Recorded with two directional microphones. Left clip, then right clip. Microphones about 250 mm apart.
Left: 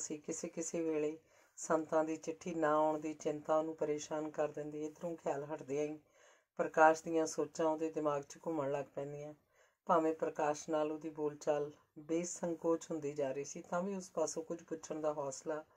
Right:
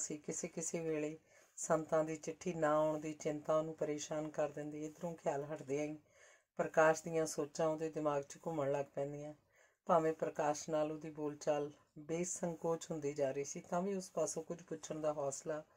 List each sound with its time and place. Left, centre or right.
0.3 s speech: right